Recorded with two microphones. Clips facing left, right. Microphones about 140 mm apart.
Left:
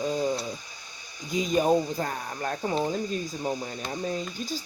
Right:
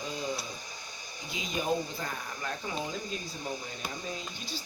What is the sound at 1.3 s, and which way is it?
Speech, 45° left (ahead or behind).